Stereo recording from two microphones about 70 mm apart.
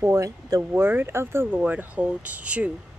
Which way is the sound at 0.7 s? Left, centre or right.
Right.